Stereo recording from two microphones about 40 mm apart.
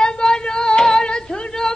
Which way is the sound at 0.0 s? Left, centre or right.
Centre.